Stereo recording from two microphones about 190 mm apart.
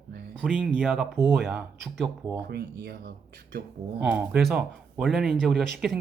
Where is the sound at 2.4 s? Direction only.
55° right (ahead or behind).